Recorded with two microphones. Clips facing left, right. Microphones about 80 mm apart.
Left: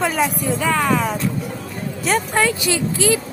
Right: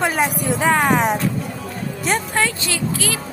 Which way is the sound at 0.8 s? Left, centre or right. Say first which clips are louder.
Right 2 dB; right.